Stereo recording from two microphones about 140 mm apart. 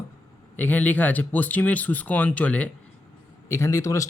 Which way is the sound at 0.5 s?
10° left (ahead or behind).